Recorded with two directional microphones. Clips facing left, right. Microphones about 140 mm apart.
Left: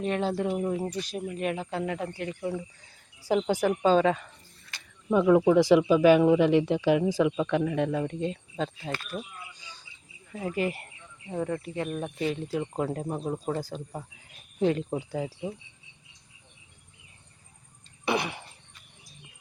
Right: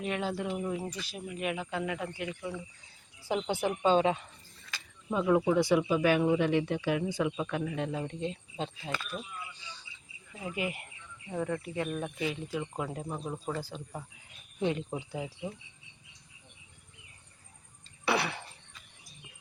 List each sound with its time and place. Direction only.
0.0 s speech: 40° left (ahead or behind)
5.1 s speech: 80° left; by 8.3 s 65° left (ahead or behind)
8.5 s speech: 40° left (ahead or behind)
12.2 s speech: 45° left (ahead or behind)
18.0 s a sound: 15° left (ahead or behind)